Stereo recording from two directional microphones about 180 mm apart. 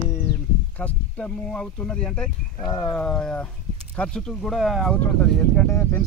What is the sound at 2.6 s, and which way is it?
Speech, 20° left (ahead or behind).